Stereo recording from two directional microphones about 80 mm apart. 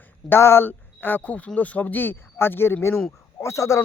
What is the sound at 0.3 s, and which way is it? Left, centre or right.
Speech, left.